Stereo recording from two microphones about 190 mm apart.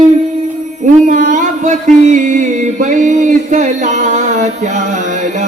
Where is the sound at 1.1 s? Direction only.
40° right (ahead or behind).